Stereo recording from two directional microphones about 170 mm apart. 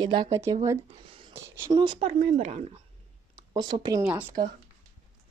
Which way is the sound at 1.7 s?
30° right (ahead or behind).